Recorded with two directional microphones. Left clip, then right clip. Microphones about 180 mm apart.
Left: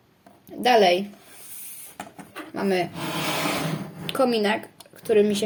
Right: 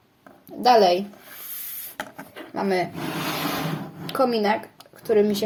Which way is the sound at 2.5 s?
15° left (ahead or behind).